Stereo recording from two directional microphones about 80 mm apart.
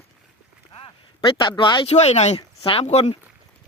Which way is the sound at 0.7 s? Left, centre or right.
Left.